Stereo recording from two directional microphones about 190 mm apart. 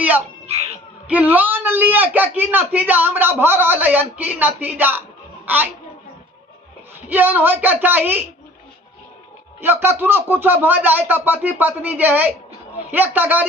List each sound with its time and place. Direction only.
0.4 s music: 35° right (ahead or behind)
1.0 s a man's voice: 10° right (ahead or behind)
7.1 s a man's voice: 10° right (ahead or behind)
9.6 s a man's voice: 10° right (ahead or behind)